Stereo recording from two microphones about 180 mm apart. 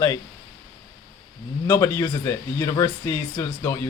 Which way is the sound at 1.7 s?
15° left (ahead or behind).